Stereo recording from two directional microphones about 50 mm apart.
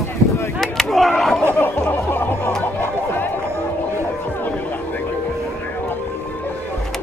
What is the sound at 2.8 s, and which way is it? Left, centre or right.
Music, left.